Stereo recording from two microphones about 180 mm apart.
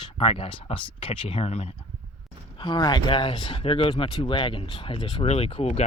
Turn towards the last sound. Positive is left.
turn(degrees=30)  # may be behind; listen again after turning